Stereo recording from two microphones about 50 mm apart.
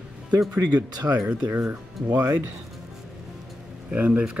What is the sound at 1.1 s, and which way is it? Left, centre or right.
Speech, right.